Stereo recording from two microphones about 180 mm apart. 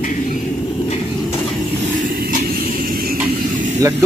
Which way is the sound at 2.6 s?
55° right (ahead or behind).